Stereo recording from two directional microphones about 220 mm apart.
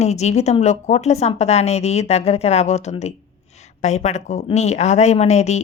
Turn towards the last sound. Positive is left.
turn(degrees=30)  # may be behind; listen again after turning